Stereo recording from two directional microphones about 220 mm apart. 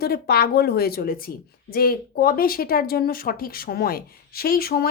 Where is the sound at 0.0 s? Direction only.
45° left (ahead or behind).